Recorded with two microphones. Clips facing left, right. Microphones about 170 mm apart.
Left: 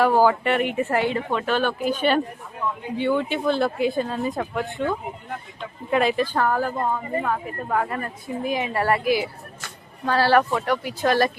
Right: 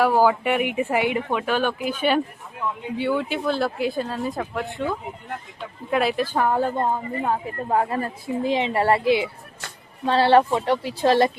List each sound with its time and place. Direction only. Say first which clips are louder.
0.0 s speech: even; 10° right (ahead or behind)
6.4 s a woman's voice: right 5 dB; 25° right (ahead or behind)